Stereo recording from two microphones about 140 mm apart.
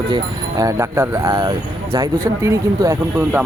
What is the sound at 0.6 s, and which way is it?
Speech, 20° right (ahead or behind).